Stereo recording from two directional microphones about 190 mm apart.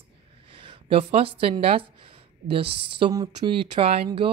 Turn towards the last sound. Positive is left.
turn(degrees=-30)  # may be behind; listen again after turning